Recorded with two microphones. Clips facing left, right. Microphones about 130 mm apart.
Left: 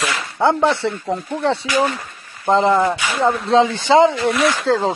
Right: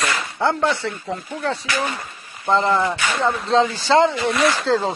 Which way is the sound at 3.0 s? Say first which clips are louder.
Left 3 dB; 10° left (ahead or behind).